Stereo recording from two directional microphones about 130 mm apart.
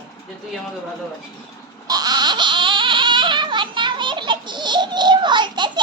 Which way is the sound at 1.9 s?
30° right (ahead or behind).